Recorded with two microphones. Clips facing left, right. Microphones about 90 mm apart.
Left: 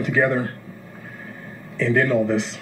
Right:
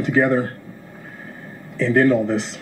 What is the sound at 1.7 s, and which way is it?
Speech, 35° right (ahead or behind).